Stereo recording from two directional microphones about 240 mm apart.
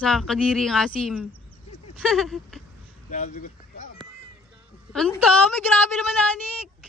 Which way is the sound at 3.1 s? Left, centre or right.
Left.